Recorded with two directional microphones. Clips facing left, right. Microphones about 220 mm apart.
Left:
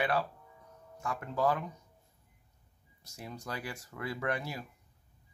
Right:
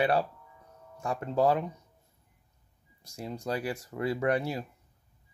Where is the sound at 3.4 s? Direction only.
35° right (ahead or behind).